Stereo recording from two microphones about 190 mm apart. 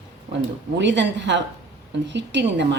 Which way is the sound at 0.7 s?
70° right (ahead or behind).